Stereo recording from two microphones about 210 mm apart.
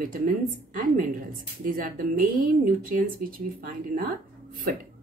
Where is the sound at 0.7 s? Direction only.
40° right (ahead or behind).